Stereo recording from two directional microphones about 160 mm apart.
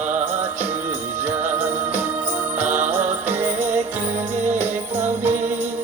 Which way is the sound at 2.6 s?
50° right (ahead or behind).